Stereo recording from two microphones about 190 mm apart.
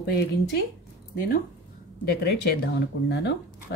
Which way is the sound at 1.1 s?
50° left (ahead or behind).